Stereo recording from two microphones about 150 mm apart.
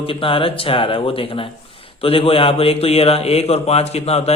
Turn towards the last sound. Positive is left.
turn(degrees=45)  # may be behind; listen again after turning